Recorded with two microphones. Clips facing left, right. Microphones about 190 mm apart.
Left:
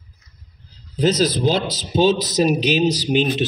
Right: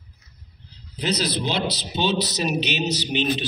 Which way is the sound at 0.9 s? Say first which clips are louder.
Left 7 dB; 45° left (ahead or behind).